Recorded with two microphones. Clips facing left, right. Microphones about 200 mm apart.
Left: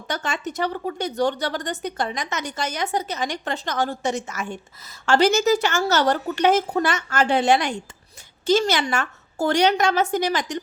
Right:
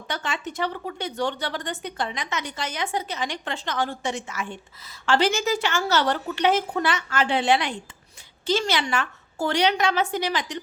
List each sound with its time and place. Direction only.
0.1 s a woman's voice: 45° left (ahead or behind)